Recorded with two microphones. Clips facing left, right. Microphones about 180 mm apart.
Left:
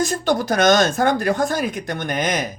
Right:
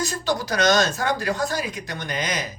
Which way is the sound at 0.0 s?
50° left (ahead or behind).